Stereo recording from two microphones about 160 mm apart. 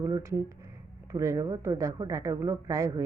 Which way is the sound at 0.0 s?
20° right (ahead or behind).